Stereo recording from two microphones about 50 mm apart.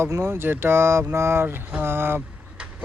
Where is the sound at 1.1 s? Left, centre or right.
Right.